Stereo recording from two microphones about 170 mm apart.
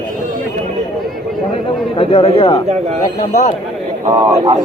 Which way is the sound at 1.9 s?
30° left (ahead or behind).